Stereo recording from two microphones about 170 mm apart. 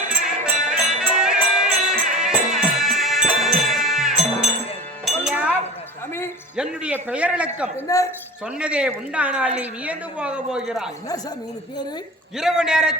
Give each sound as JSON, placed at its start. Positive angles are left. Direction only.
{"t": 0.3, "sound": "music", "side_deg": -5}
{"t": 6.6, "sound": "speech", "side_deg": -5}
{"t": 7.9, "sound": "speech", "side_deg": 20}
{"t": 8.5, "sound": "speech", "side_deg": -5}
{"t": 12.4, "sound": "a man's voice", "side_deg": -5}